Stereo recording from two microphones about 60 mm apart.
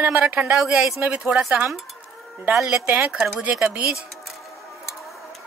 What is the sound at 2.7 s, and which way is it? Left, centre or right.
Speech, right.